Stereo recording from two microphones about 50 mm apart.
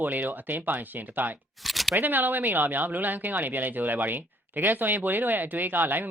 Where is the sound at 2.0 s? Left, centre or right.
Right.